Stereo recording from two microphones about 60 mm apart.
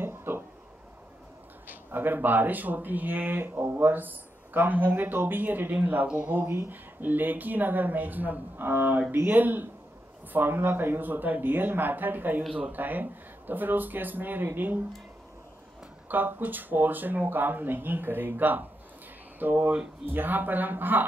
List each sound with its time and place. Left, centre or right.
0.0 s a sound: right
1.7 s speech: right
6.3 s speech: right
16.1 s speech: right